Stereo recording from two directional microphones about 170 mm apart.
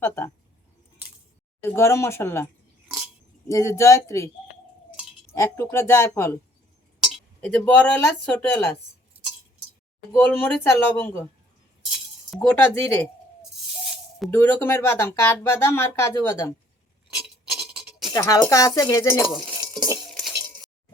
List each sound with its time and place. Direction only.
1.7 s speech: 15° left (ahead or behind)
3.5 s speech: 20° left (ahead or behind)
5.3 s speech: 15° left (ahead or behind)
7.0 s speech: 5° left (ahead or behind)
10.1 s speech: 15° left (ahead or behind)
11.9 s cutlery: centre (ahead or behind)
12.5 s speech: 10° left (ahead or behind)
14.3 s speech: 15° left (ahead or behind)
17.1 s filing: 5° right (ahead or behind)
18.1 s speech: 20° left (ahead or behind)
19.2 s stir: centre (ahead or behind)
20.1 s cutlery: centre (ahead or behind)